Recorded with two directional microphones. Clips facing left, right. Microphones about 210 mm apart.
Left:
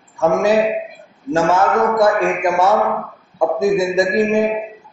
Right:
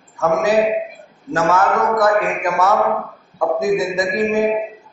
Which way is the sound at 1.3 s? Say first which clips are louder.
Left 2 dB; 25° left (ahead or behind).